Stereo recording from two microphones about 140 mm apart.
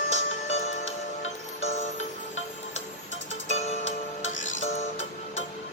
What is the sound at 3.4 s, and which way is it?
Music, 55° left (ahead or behind).